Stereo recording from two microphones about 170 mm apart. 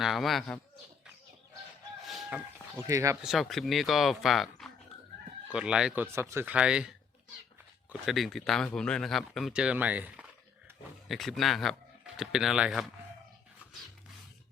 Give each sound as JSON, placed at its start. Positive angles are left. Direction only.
{"t": 0.0, "sound": "speech", "side_deg": 0}
{"t": 2.0, "sound": "chicken", "side_deg": 0}
{"t": 2.7, "sound": "speech", "side_deg": -20}
{"t": 3.2, "sound": "speech", "side_deg": 0}
{"t": 8.0, "sound": "speech", "side_deg": 0}